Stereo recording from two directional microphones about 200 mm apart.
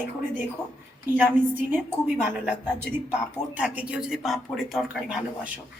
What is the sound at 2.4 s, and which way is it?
Speech, 10° right (ahead or behind).